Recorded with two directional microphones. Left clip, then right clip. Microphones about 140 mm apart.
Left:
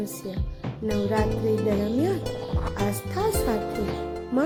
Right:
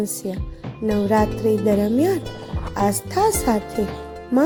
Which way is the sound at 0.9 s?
50° right (ahead or behind).